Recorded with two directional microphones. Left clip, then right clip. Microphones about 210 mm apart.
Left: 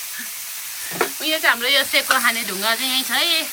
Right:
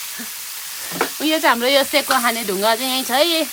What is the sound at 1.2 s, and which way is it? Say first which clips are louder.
Sizzle: right 3 dB; 30° right (ahead or behind).